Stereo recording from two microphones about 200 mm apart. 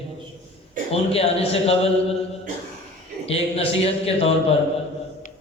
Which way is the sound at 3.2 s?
30° left (ahead or behind).